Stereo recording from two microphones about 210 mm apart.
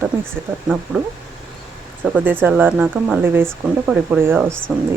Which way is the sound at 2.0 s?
10° right (ahead or behind).